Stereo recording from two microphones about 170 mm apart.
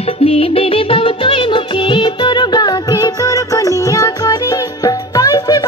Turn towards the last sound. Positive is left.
turn(degrees=20)  # may be behind; listen again after turning